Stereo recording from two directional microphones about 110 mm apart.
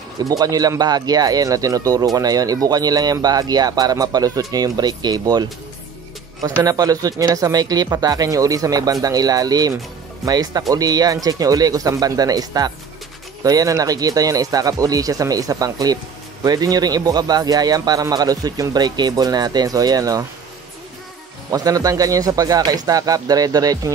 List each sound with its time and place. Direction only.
0.2 s speech: 35° right (ahead or behind)
6.6 s speech: 35° right (ahead or behind)
21.5 s speech: 35° right (ahead or behind)